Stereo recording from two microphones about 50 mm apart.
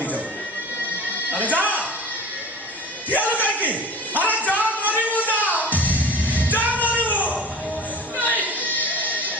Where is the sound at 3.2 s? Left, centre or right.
Left.